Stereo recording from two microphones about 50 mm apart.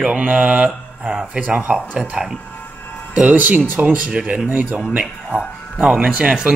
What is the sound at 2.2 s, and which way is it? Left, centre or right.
Speech, centre.